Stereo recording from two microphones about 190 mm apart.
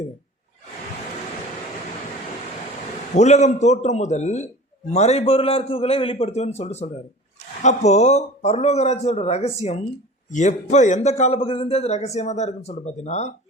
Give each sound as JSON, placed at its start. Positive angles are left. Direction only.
{"t": 3.2, "sound": "a man's voice", "side_deg": 40}